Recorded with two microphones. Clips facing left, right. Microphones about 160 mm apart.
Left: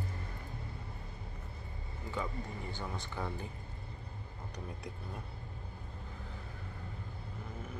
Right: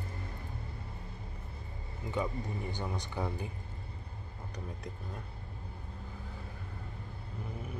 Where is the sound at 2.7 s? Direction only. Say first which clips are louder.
Right 3 dB; 15° right (ahead or behind).